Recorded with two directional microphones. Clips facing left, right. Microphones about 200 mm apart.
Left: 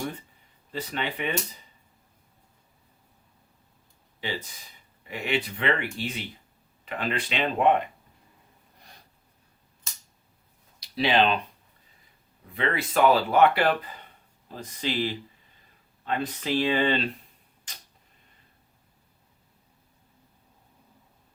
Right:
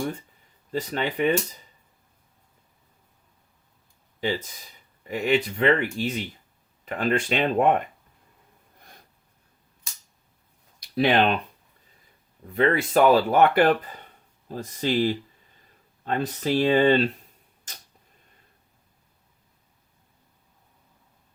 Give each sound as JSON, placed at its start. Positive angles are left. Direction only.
{"t": 0.7, "sound": "speech", "side_deg": -45}
{"t": 4.2, "sound": "speech", "side_deg": -45}
{"t": 10.8, "sound": "a sound", "side_deg": -55}
{"t": 12.5, "sound": "speech", "side_deg": -45}